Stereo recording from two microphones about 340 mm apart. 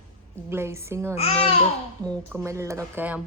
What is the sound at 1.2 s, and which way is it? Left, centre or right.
Speech, centre.